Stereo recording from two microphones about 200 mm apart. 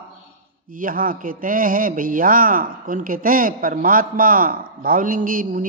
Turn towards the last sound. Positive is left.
turn(degrees=-45)  # may be behind; listen again after turning